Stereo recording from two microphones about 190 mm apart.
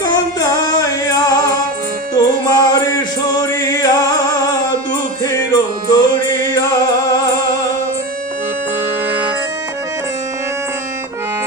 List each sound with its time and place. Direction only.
0.0 s music: 20° left (ahead or behind)
5.2 s music: 20° left (ahead or behind)